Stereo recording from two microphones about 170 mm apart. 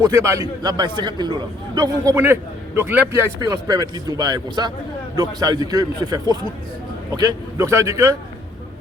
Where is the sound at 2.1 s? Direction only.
15° right (ahead or behind).